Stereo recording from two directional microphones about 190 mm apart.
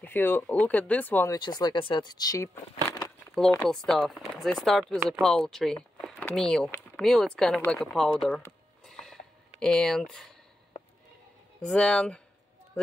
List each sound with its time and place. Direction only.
0.0 s speech: 10° left (ahead or behind)
3.6 s speech: centre (ahead or behind)
8.8 s a sound: centre (ahead or behind)
11.6 s speech: 5° left (ahead or behind)